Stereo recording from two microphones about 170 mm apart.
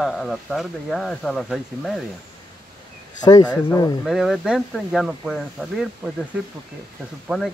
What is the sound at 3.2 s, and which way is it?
Speech, 25° left (ahead or behind).